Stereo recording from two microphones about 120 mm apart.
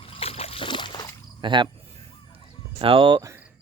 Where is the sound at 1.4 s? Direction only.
40° right (ahead or behind).